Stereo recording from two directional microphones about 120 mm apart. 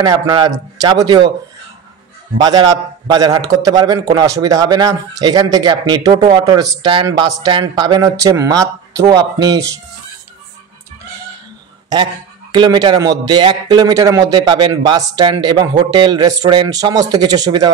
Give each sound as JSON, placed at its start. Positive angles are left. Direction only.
{"t": 0.0, "sound": "a man's voice", "side_deg": -35}
{"t": 2.3, "sound": "a man's voice", "side_deg": -35}
{"t": 12.5, "sound": "a man's voice", "side_deg": -35}